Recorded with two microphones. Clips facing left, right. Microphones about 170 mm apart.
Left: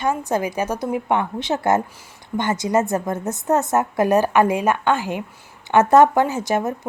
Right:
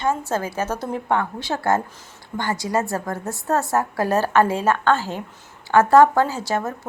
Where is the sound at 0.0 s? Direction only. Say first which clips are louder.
Left 2 dB; 15° left (ahead or behind).